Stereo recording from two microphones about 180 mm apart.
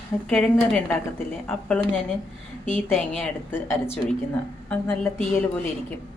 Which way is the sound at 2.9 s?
Centre (ahead or behind).